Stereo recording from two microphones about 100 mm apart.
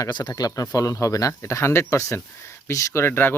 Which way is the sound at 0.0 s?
45° left (ahead or behind).